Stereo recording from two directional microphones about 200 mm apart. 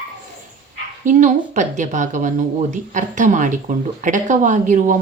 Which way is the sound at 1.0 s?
40° right (ahead or behind).